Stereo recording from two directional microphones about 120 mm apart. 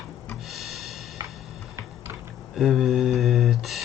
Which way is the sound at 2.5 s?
5° right (ahead or behind).